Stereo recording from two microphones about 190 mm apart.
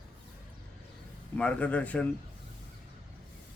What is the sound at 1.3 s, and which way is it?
Speech, 5° left (ahead or behind).